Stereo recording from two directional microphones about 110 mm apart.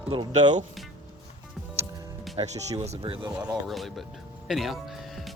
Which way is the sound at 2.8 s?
70° right (ahead or behind).